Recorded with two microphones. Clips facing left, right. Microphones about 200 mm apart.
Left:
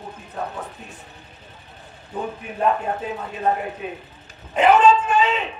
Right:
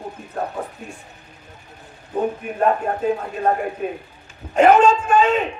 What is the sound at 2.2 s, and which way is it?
A man's voice, 50° right (ahead or behind).